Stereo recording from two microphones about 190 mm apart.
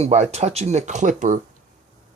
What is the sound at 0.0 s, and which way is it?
Speech, 35° right (ahead or behind).